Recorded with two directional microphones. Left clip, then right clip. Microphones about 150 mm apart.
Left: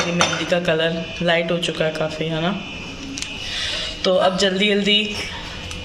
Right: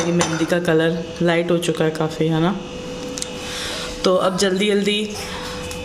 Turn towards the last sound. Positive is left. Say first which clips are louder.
# left 2 dB
turn(degrees=-90)